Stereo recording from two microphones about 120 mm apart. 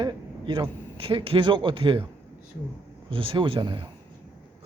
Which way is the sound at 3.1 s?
45° right (ahead or behind).